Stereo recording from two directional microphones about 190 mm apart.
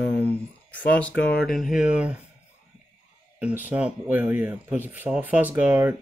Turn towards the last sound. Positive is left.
turn(degrees=-10)  # may be behind; listen again after turning